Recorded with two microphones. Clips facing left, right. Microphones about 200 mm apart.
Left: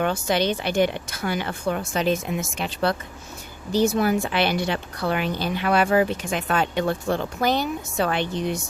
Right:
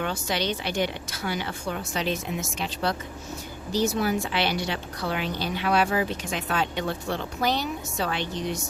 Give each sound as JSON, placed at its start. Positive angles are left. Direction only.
{"t": 0.0, "sound": "a woman's voice", "side_deg": 50}